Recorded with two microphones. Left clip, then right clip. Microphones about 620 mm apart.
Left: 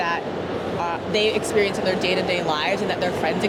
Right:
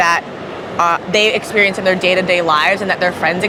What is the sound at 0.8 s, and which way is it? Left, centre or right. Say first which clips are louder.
Speech: right 11 dB; right.